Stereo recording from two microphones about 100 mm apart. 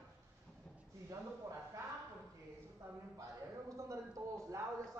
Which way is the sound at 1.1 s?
35° right (ahead or behind).